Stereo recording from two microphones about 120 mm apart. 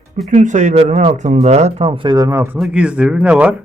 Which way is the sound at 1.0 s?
85° right.